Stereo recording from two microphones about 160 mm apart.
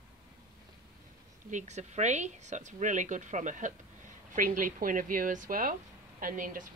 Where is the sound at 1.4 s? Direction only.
50° right (ahead or behind).